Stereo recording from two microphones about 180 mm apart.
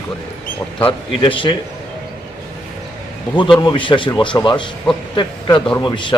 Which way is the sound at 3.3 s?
25° left (ahead or behind).